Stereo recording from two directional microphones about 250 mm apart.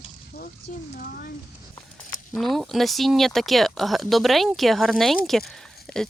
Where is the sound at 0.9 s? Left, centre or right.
Left.